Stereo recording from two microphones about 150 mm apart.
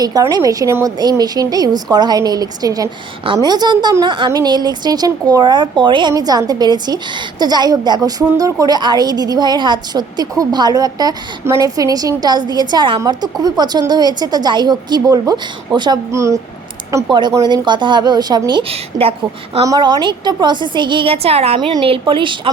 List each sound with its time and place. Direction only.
0.0 s a woman's voice: 25° right (ahead or behind)
19.6 s a woman's voice: 25° right (ahead or behind)